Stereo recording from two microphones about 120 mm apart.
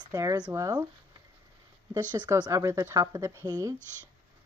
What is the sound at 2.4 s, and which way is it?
Speech, 25° right (ahead or behind).